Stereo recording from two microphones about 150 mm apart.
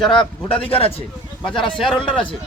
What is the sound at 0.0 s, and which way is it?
Speech, 5° left (ahead or behind).